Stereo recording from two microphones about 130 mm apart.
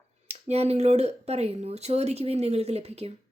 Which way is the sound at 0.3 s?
55° right (ahead or behind).